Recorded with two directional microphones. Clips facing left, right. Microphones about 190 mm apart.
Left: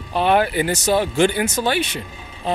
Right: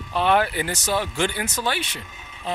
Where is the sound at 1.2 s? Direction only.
15° left (ahead or behind).